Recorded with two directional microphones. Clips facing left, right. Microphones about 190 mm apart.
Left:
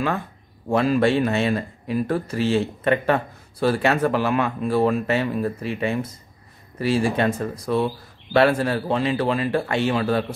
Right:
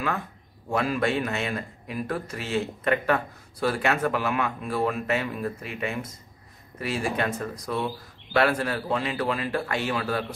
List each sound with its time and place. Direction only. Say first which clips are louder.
0.7 s speech: left 7 dB; 30° left (ahead or behind)